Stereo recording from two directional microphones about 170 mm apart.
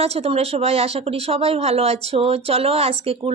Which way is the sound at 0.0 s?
35° right (ahead or behind).